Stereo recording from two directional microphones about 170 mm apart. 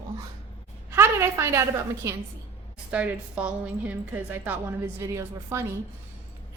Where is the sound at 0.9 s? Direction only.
15° right (ahead or behind).